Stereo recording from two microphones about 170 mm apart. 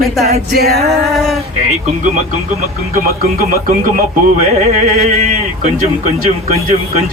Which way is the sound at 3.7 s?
55° right (ahead or behind).